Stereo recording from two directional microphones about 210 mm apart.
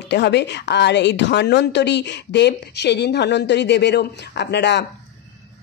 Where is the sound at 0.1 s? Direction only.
55° left (ahead or behind).